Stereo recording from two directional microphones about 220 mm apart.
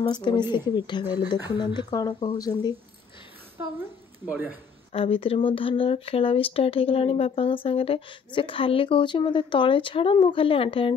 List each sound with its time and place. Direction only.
0.1 s speech: 20° left (ahead or behind)
4.3 s a man's voice: 5° right (ahead or behind)
4.9 s speech: 25° left (ahead or behind)